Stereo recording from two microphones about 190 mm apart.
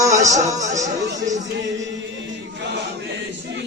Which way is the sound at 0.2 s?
15° right (ahead or behind).